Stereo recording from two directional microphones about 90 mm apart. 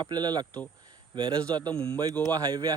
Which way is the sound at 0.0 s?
50° right (ahead or behind).